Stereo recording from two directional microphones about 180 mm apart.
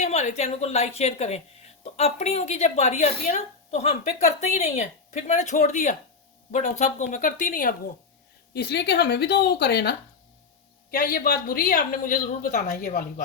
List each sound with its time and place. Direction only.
0.0 s a woman's voice: 40° left (ahead or behind)
8.5 s a woman's voice: 65° left (ahead or behind)
10.9 s speech: 55° left (ahead or behind)